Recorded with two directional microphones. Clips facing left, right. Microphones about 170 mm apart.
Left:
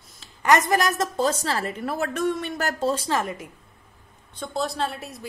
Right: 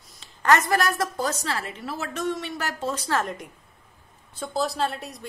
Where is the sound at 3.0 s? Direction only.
10° left (ahead or behind).